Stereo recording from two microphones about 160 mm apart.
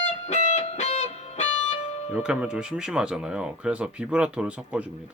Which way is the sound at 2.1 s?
5° right (ahead or behind).